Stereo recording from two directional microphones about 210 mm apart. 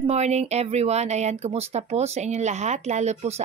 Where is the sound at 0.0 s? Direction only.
30° right (ahead or behind).